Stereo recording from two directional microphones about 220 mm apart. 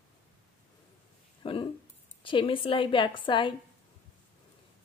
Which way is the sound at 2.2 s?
25° left (ahead or behind).